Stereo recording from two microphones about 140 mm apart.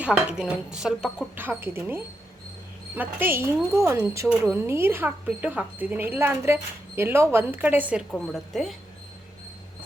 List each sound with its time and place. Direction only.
0.0 s speech: 10° right (ahead or behind)
1.4 s a woman's voice: 15° right (ahead or behind)
8.1 s speech: 5° left (ahead or behind)